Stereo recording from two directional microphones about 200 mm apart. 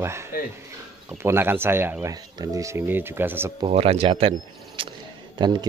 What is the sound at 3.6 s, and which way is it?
Speech, 30° right (ahead or behind).